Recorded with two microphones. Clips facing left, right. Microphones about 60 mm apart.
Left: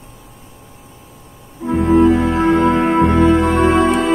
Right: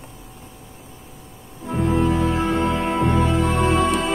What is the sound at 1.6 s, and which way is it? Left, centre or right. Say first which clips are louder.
Music: left 8 dB; left.